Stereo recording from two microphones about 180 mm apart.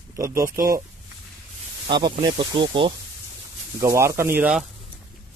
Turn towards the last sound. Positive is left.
turn(degrees=-5)  # may be behind; listen again after turning